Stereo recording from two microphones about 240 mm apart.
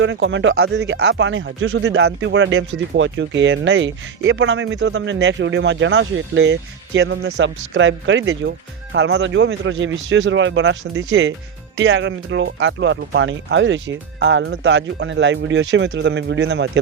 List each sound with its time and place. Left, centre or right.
0.0 s speech: right